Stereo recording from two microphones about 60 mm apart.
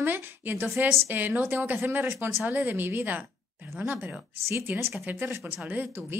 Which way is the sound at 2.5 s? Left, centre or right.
Right.